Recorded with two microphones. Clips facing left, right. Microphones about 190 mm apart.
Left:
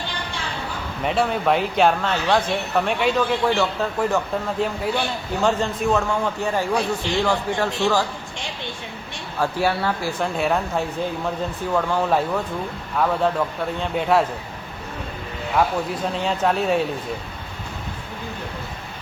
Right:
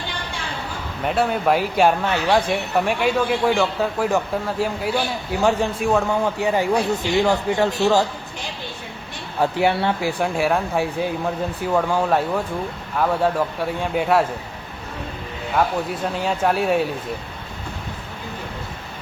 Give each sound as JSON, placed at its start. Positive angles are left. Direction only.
{"t": 1.0, "sound": "a man's voice", "side_deg": -5}
{"t": 5.4, "sound": "a man's voice", "side_deg": -15}
{"t": 9.4, "sound": "a man's voice", "side_deg": -20}
{"t": 10.3, "sound": "a man's voice", "side_deg": 0}
{"t": 16.1, "sound": "a man's voice", "side_deg": -5}